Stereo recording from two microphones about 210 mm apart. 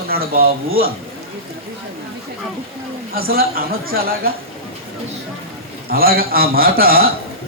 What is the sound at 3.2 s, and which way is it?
Speech, 45° right (ahead or behind).